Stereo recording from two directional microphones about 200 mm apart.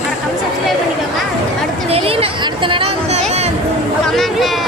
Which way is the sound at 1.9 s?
30° right (ahead or behind).